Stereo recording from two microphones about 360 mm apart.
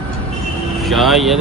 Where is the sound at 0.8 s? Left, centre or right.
Centre.